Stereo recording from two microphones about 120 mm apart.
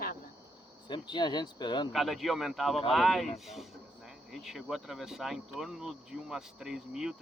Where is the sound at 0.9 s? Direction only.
40° left (ahead or behind).